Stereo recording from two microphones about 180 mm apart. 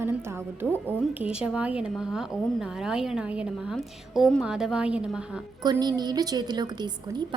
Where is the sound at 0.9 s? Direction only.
5° right (ahead or behind).